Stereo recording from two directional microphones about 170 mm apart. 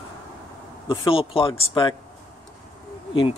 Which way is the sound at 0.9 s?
30° left (ahead or behind).